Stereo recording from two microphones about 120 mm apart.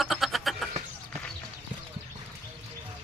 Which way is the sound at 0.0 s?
Centre (ahead or behind).